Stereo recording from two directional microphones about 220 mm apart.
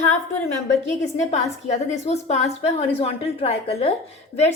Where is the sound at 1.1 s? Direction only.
30° left (ahead or behind).